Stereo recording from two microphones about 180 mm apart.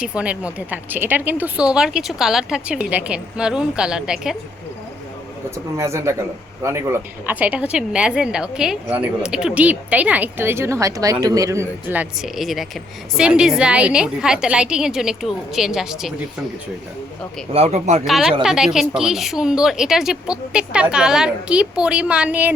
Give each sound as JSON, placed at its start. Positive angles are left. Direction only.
{"t": 0.0, "sound": "a woman's voice", "side_deg": -5}
{"t": 5.7, "sound": "a woman's voice", "side_deg": -15}
{"t": 17.5, "sound": "speech", "side_deg": -35}
{"t": 18.0, "sound": "a woman's voice", "side_deg": 0}